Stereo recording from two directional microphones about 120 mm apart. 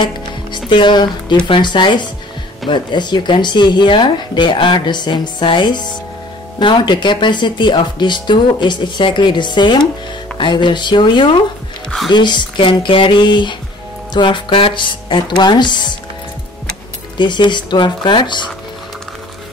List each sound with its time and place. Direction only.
0.0 s speech: 40° left (ahead or behind)
17.2 s speech: 40° left (ahead or behind)